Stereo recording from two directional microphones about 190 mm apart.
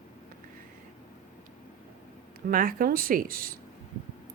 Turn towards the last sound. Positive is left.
turn(degrees=-50)  # may be behind; listen again after turning